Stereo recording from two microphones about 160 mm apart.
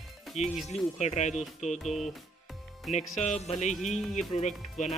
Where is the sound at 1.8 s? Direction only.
Centre (ahead or behind).